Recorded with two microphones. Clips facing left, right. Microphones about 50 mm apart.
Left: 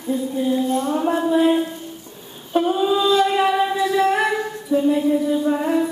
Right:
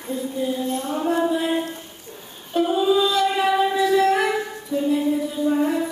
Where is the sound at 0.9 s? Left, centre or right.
Centre.